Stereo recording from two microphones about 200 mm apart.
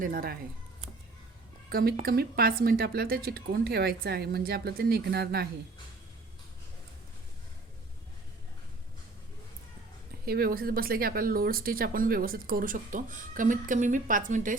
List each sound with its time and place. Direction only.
0.0 s speech: 45° right (ahead or behind)
1.7 s speech: 50° right (ahead or behind)
10.2 s speech: 50° right (ahead or behind)